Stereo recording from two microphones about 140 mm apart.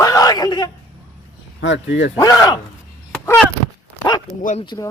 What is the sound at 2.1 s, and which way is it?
Speech, 25° left (ahead or behind).